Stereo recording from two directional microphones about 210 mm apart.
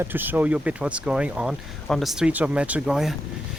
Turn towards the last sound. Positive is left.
turn(degrees=0)  # may be behind; listen again after turning